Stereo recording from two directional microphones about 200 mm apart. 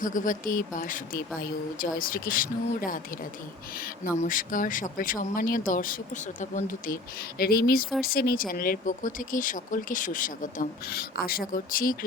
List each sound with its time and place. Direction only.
0.0 s speech: 40° left (ahead or behind)